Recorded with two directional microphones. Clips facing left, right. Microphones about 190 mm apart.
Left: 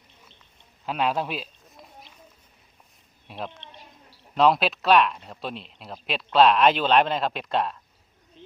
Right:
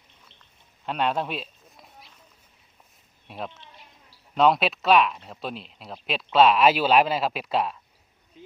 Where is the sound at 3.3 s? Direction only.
Centre (ahead or behind).